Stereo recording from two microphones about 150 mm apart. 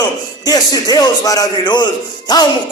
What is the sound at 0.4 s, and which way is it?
Speech, 25° left (ahead or behind).